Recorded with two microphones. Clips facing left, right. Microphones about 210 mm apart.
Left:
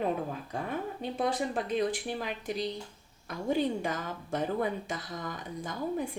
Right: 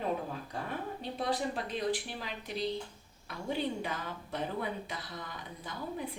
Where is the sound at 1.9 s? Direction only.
50° left (ahead or behind).